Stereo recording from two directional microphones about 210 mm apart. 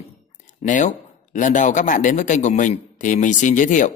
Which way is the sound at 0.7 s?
35° left (ahead or behind).